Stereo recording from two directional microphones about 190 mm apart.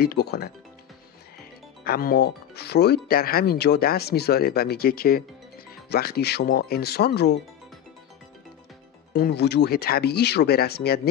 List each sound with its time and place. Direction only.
0.0 s speech: 55° left (ahead or behind)
1.9 s speech: 50° left (ahead or behind)
9.1 s speech: 55° left (ahead or behind)